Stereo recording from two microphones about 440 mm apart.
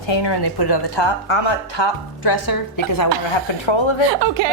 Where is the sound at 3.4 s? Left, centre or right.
Left.